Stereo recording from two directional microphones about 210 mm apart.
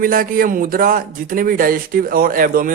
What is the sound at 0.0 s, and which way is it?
Speech, 40° right (ahead or behind).